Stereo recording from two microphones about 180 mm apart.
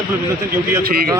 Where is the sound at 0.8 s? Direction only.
55° right (ahead or behind).